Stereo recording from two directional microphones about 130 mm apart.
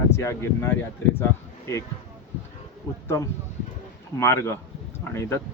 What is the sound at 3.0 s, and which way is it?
Speech, 25° left (ahead or behind).